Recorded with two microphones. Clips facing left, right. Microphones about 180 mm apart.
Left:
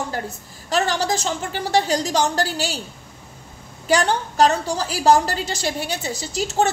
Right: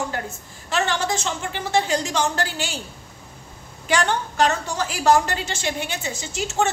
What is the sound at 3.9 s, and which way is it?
A woman's voice, 35° left (ahead or behind).